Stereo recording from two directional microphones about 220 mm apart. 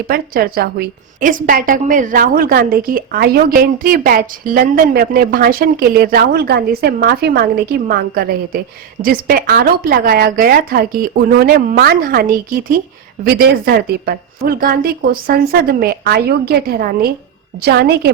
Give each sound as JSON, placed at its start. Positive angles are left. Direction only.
{"t": 0.1, "sound": "a woman's voice", "side_deg": -45}